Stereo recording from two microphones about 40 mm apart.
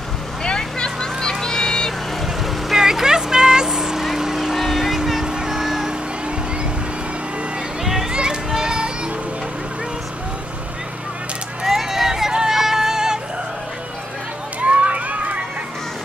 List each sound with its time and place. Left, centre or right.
0.4 s vehicle: left
2.2 s vehicle: centre
5.2 s vehicle: centre
5.6 s a sound: centre
7.8 s a sound: centre
8.1 s music: right
11.6 s vehicle: centre
12.3 s a sound: centre
14.6 s run: right